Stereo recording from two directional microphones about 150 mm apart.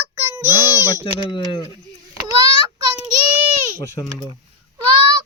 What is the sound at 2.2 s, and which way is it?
Speech, 25° right (ahead or behind).